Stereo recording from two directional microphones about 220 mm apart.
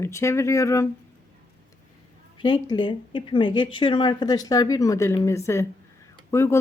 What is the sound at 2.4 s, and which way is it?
Speech, 20° left (ahead or behind).